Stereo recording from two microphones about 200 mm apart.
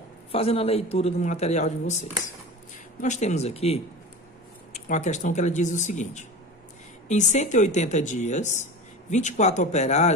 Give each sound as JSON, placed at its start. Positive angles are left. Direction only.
{"t": 0.3, "sound": "speech", "side_deg": 30}